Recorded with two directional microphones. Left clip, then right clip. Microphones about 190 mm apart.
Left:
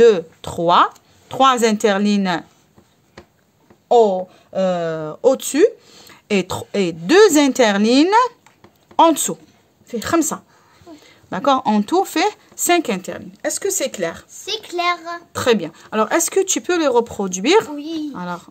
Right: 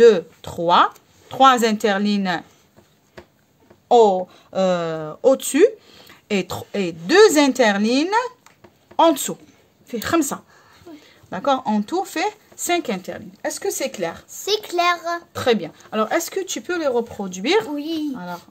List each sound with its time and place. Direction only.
0.0 s speech: 30° left (ahead or behind)
3.9 s speech: 5° left (ahead or behind)
4.9 s speech: 20° left (ahead or behind)
9.8 s a woman's voice: 10° left (ahead or behind)
11.1 s speech: 25° left (ahead or behind)
14.3 s a child's voice: 35° right (ahead or behind)
15.3 s speech: 25° left (ahead or behind)
17.7 s a child's voice: 35° right (ahead or behind)
18.1 s speech: 35° left (ahead or behind)